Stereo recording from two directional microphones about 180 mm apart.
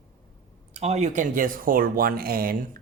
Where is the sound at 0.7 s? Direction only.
35° right (ahead or behind).